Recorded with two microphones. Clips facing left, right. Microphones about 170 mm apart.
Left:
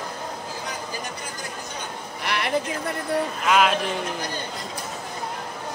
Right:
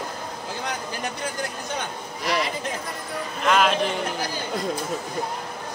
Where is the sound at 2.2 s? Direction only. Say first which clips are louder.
Right 1 dB; 65° left (ahead or behind).